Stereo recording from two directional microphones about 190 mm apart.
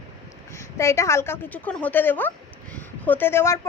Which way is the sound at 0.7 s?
15° left (ahead or behind).